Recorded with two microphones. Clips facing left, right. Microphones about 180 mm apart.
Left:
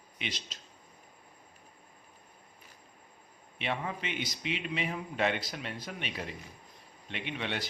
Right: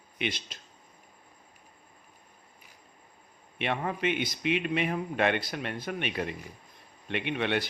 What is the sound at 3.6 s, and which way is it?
A man's voice, 60° right (ahead or behind).